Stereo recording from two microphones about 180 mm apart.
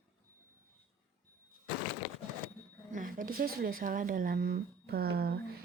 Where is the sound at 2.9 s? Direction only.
45° right (ahead or behind).